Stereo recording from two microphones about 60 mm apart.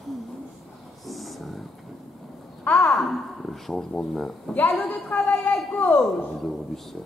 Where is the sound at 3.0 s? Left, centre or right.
Centre.